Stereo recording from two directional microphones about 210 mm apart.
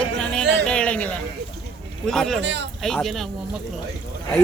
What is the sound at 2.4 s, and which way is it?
Speech, 55° right (ahead or behind).